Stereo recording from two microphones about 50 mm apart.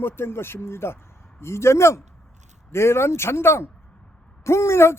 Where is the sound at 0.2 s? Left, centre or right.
Left.